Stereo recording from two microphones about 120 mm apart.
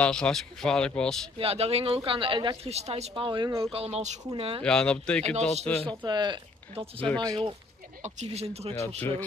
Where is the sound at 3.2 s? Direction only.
40° right (ahead or behind).